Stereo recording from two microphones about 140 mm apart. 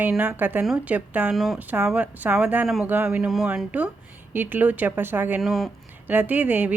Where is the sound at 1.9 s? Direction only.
10° right (ahead or behind).